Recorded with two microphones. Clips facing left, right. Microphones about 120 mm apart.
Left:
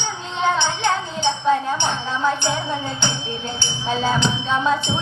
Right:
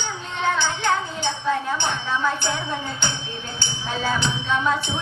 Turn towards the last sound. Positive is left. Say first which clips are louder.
# left 2 dB
turn(degrees=20)  # may be behind; listen again after turning